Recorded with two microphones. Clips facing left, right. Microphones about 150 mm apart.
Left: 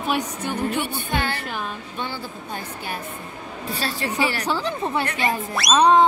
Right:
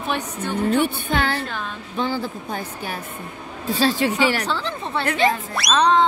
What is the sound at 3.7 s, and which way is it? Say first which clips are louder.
Speech: right 8 dB; 90° right.